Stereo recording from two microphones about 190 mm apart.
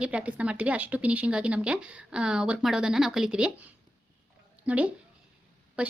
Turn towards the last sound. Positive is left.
turn(degrees=-5)  # may be behind; listen again after turning